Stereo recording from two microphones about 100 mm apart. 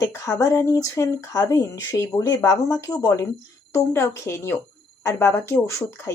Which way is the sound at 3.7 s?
25° left (ahead or behind).